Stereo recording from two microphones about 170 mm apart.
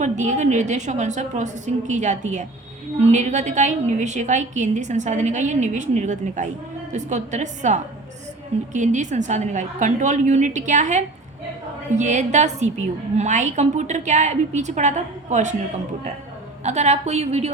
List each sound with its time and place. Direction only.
0.0 s a woman's voice: 45° right (ahead or behind)
16.6 s a woman's voice: 40° right (ahead or behind)